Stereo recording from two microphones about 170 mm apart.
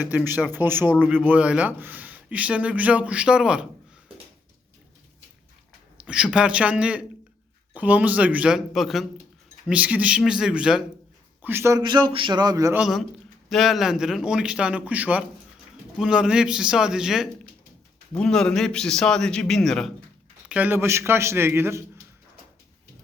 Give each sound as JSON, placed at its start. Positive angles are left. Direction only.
{"t": 0.0, "sound": "a man's voice", "side_deg": -10}
{"t": 6.0, "sound": "a man's voice", "side_deg": -5}
{"t": 11.8, "sound": "speech", "side_deg": -25}
{"t": 12.7, "sound": "a man's voice", "side_deg": 0}
{"t": 20.5, "sound": "a man's voice", "side_deg": -10}